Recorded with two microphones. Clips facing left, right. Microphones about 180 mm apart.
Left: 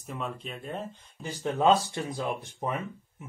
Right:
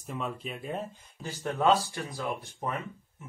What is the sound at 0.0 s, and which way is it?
Speech, centre (ahead or behind).